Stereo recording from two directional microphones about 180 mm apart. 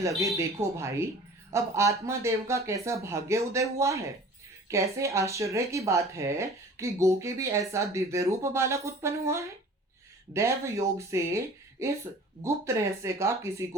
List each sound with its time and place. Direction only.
0.2 s speech: 15° right (ahead or behind)